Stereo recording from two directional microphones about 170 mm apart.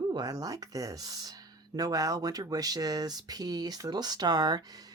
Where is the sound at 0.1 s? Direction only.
25° right (ahead or behind).